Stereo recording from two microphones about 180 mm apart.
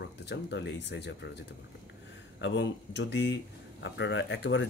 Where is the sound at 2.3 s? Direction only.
80° left.